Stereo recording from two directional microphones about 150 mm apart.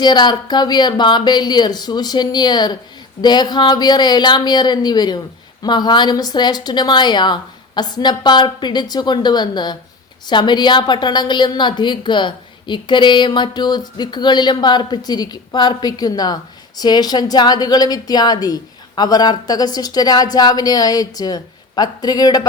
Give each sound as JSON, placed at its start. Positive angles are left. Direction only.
{"t": 0.0, "sound": "a woman's voice", "side_deg": 30}